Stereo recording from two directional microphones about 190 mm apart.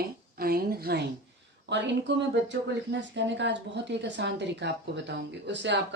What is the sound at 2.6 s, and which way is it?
A woman's voice, 70° right (ahead or behind).